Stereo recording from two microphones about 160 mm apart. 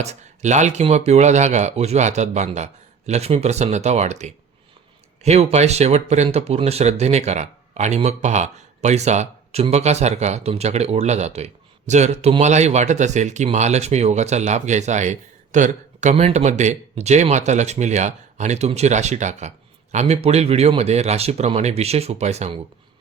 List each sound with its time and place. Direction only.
0.0 s speech: 45° right (ahead or behind)